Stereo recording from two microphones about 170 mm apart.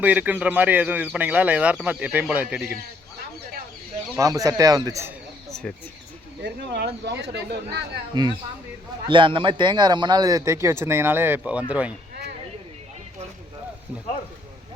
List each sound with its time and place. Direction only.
0.0 s speech: 10° right (ahead or behind)
4.1 s speech: 20° right (ahead or behind)
5.5 s a sound: 5° left (ahead or behind)
6.4 s speech: 80° right
8.1 s speech: 25° right (ahead or behind)